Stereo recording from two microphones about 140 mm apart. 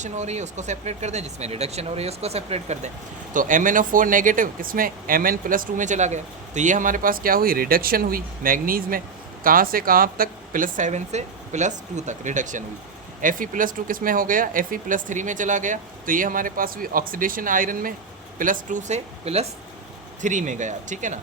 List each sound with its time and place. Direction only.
0.0 s speech: 55° right (ahead or behind)
3.3 s speech: 70° right (ahead or behind)
13.2 s speech: 75° right (ahead or behind); by 19.5 s 50° right (ahead or behind)
20.2 s speech: 60° right (ahead or behind)